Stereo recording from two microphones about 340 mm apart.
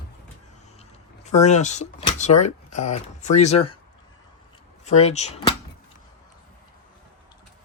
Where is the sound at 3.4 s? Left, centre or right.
Centre.